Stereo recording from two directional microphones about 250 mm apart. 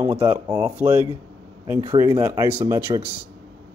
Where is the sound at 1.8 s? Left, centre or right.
Centre.